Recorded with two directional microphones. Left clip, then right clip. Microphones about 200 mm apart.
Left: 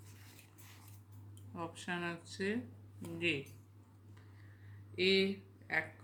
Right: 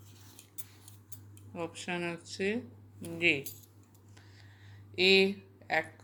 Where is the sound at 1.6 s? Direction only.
10° right (ahead or behind).